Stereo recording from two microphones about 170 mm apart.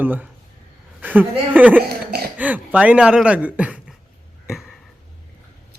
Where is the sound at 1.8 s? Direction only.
65° right (ahead or behind).